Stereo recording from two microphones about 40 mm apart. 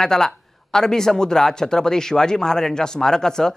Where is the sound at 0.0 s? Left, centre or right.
Centre.